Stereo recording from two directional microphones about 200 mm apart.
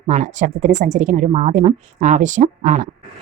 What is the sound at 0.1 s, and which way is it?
A woman's voice, 35° right (ahead or behind).